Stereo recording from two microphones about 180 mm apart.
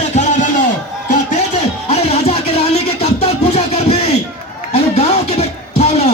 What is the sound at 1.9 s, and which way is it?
Music, 35° left (ahead or behind).